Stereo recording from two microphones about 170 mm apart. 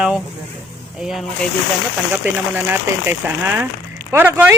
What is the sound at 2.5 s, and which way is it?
Speech, 10° right (ahead or behind).